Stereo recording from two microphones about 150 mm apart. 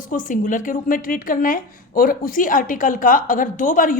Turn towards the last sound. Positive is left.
turn(degrees=60)  # may be behind; listen again after turning